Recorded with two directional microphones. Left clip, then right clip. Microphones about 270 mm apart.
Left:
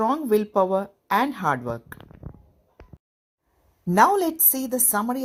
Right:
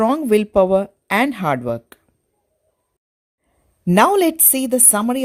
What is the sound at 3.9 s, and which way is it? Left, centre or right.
A woman's voice, right.